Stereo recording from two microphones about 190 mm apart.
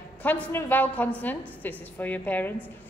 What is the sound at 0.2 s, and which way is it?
A woman's voice, 10° left (ahead or behind).